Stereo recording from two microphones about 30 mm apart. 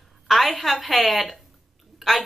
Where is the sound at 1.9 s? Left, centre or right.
Centre.